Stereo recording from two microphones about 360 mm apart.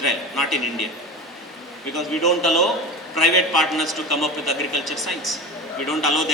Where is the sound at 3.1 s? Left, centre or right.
Left.